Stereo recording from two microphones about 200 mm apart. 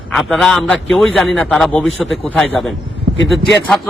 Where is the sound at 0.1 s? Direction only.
Centre (ahead or behind).